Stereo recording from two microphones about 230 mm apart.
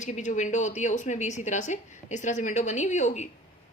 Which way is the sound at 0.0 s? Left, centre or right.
Left.